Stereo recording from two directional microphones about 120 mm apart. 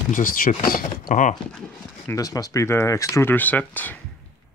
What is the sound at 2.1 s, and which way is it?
Speech, 30° left (ahead or behind).